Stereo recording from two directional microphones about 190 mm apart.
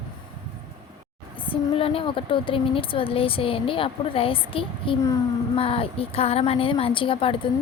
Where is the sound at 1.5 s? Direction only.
30° left (ahead or behind).